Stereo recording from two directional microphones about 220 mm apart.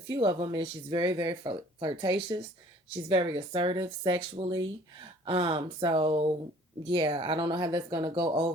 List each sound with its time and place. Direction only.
0.1 s speech: 20° right (ahead or behind)